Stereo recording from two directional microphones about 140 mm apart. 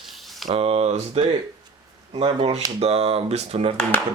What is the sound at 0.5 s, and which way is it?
Speech, 45° right (ahead or behind).